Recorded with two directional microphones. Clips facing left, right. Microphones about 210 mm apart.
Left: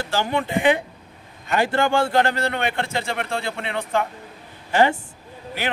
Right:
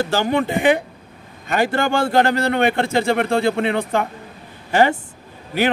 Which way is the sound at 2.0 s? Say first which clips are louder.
Right 6 dB; 40° right (ahead or behind).